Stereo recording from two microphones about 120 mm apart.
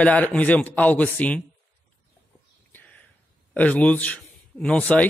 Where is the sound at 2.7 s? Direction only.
15° left (ahead or behind).